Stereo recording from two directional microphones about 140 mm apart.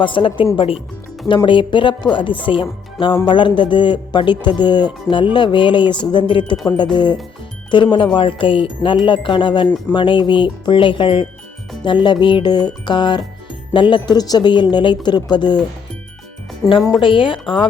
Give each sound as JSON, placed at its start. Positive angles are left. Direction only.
{"t": 0.0, "sound": "a man's voice", "side_deg": 40}
{"t": 17.0, "sound": "a man's voice", "side_deg": 35}